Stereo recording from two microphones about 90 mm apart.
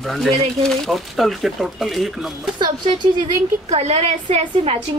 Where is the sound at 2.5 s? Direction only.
60° right (ahead or behind).